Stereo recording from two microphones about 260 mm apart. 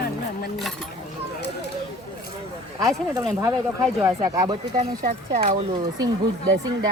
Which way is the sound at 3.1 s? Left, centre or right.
Centre.